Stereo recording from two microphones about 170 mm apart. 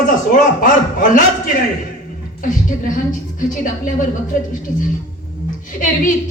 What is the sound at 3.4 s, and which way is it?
A man's voice, 50° left (ahead or behind).